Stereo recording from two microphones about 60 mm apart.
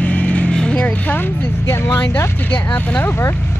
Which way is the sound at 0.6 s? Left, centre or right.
Left.